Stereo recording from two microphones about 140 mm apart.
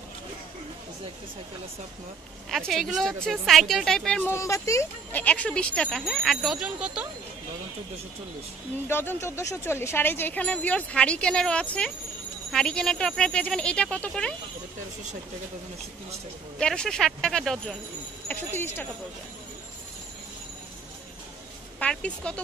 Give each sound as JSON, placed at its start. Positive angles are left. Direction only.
{"t": 2.7, "sound": "speech", "side_deg": 0}
{"t": 4.3, "sound": "speech", "side_deg": 20}
{"t": 5.2, "sound": "speech", "side_deg": 10}
{"t": 8.8, "sound": "speech", "side_deg": 15}
{"t": 16.5, "sound": "speech", "side_deg": 5}
{"t": 18.3, "sound": "speech", "side_deg": 15}
{"t": 21.7, "sound": "a woman's voice", "side_deg": 10}